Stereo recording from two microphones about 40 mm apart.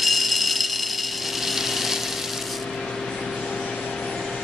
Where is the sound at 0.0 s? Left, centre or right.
Centre.